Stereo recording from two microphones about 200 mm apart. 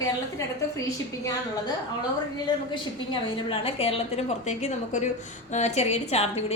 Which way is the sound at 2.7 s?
25° left (ahead or behind).